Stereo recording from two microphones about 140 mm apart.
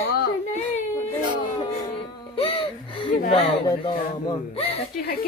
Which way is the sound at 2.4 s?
40° left (ahead or behind).